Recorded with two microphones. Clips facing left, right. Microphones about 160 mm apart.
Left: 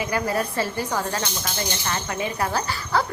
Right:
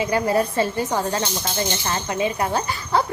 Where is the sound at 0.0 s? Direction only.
25° right (ahead or behind).